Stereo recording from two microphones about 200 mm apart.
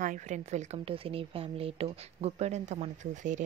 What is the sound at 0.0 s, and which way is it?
A woman's voice, 40° right (ahead or behind).